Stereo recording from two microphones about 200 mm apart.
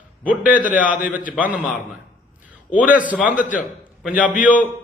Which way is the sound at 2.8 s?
10° right (ahead or behind).